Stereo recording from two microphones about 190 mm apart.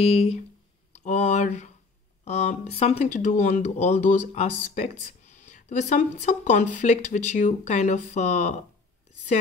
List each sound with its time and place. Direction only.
0.0 s speech: 35° left (ahead or behind)